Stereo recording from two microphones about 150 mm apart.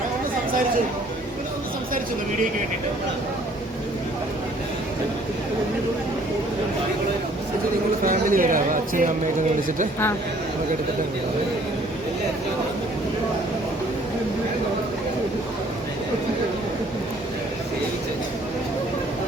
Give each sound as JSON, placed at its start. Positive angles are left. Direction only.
{"t": 8.0, "sound": "speech", "side_deg": -70}